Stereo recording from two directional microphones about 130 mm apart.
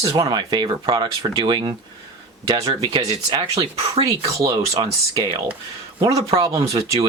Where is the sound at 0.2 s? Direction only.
35° right (ahead or behind).